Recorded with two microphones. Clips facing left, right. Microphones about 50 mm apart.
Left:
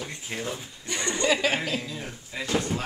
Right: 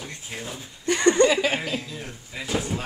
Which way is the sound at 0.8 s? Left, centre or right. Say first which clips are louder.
Right 11 dB; right.